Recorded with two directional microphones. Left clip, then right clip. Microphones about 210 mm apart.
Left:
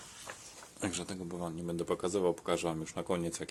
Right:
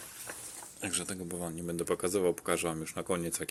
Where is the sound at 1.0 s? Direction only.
Centre (ahead or behind).